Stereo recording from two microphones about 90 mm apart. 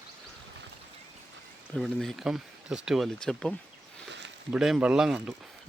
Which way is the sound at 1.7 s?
5° left (ahead or behind).